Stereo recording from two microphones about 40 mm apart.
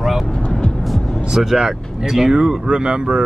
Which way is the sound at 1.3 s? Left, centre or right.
Centre.